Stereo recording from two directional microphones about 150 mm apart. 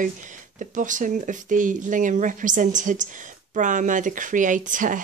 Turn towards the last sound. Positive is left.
turn(degrees=-60)  # may be behind; listen again after turning